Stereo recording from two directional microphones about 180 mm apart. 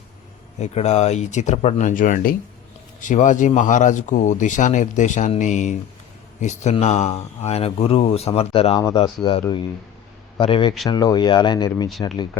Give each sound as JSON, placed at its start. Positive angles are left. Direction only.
{"t": 0.6, "sound": "speech", "side_deg": 40}
{"t": 8.8, "sound": "speech", "side_deg": 20}